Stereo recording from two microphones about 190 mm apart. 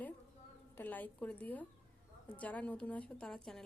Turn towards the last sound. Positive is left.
turn(degrees=0)  # may be behind; listen again after turning